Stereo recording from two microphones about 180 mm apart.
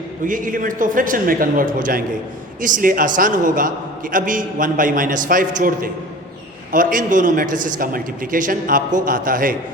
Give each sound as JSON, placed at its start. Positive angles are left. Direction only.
{"t": 0.3, "sound": "a man's voice", "side_deg": -50}